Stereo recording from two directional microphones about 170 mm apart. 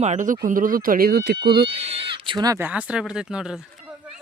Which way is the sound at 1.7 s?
35° right (ahead or behind).